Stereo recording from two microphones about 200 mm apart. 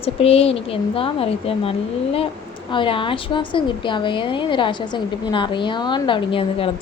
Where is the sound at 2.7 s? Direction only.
25° left (ahead or behind).